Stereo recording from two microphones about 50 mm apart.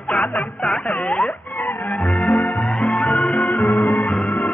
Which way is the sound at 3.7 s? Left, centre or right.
Left.